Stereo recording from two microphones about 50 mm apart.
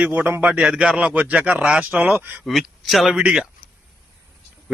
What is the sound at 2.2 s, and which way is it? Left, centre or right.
Speech, right.